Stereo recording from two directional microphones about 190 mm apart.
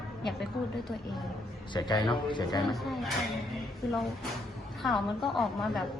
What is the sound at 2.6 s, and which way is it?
Speech, centre (ahead or behind).